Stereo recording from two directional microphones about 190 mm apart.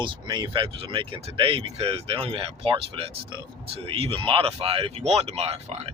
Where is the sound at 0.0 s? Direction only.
25° right (ahead or behind).